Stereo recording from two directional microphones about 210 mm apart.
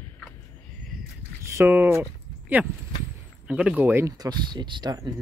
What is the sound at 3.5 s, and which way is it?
Speech, 5° right (ahead or behind).